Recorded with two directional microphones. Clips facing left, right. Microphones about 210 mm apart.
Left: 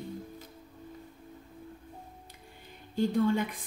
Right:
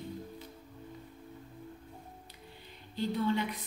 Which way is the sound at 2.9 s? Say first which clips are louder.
Left 5 dB; 45° left (ahead or behind).